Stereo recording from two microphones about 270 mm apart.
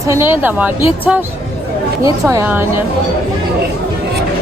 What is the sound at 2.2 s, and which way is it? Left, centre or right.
Speech, centre.